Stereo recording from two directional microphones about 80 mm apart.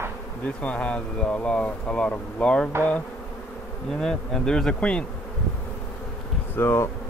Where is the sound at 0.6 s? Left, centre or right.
Centre.